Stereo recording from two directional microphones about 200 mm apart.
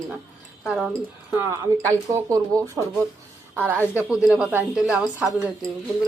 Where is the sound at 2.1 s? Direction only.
15° right (ahead or behind).